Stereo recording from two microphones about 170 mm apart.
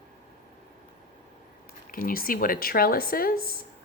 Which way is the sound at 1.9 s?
60° left (ahead or behind).